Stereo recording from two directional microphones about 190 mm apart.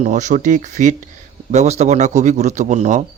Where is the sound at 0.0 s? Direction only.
40° right (ahead or behind).